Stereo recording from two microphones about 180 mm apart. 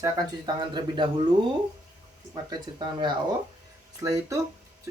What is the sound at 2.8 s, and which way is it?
Speech, 25° right (ahead or behind).